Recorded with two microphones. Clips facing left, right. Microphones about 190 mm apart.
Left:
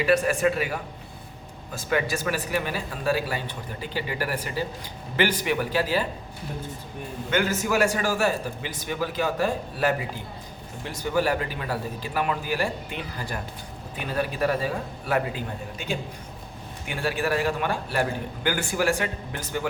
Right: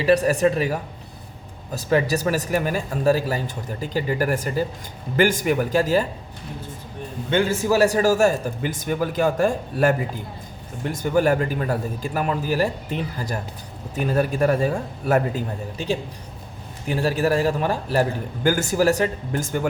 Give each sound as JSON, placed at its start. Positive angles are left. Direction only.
{"t": 0.0, "sound": "a man's voice", "side_deg": -35}
{"t": 7.3, "sound": "a man's voice", "side_deg": -30}